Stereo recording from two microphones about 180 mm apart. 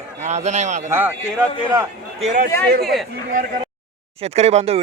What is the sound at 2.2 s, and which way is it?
Speech, 45° right (ahead or behind).